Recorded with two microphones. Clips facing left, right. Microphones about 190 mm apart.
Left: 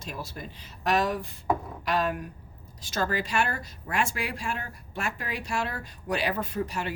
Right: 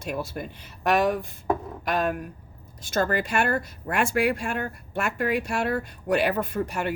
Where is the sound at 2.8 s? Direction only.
55° right (ahead or behind).